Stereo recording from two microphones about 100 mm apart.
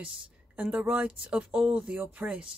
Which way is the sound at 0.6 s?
15° right (ahead or behind).